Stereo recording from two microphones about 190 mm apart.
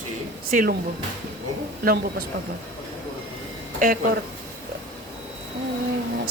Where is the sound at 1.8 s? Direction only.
55° right (ahead or behind).